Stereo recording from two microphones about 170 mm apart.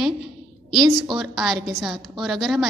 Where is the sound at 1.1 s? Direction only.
Centre (ahead or behind).